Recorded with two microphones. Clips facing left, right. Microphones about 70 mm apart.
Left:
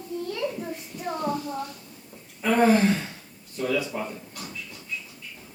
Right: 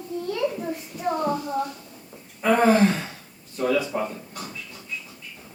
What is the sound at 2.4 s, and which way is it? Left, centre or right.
Speech, centre.